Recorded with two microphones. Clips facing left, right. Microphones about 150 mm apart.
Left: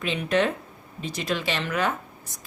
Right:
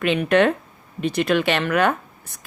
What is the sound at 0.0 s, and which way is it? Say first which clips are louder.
A woman's voice: right 6 dB; 65° right (ahead or behind).